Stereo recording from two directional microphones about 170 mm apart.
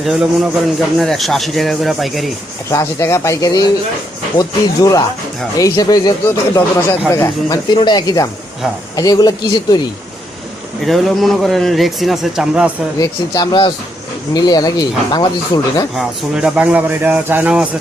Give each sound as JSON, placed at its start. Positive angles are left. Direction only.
{"t": 0.0, "sound": "a man's voice", "side_deg": 0}
{"t": 2.6, "sound": "speech", "side_deg": 15}
{"t": 10.8, "sound": "a man's voice", "side_deg": 0}
{"t": 13.0, "sound": "speech", "side_deg": 20}
{"t": 16.0, "sound": "a man's voice", "side_deg": -5}